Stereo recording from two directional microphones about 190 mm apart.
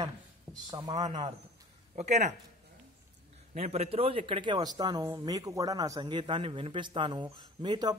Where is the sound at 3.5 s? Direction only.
35° right (ahead or behind).